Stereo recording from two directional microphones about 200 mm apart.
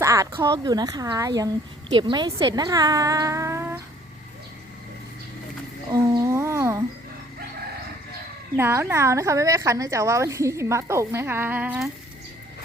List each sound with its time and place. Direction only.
0.0 s speech: 15° right (ahead or behind)
5.9 s humming: 15° right (ahead or behind)
8.5 s speech: 10° right (ahead or behind)